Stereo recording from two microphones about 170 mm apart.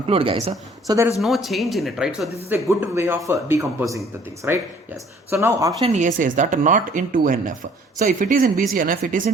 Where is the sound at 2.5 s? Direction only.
15° right (ahead or behind).